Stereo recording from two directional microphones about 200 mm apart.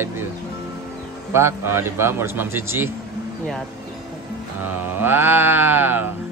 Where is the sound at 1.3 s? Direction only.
10° right (ahead or behind).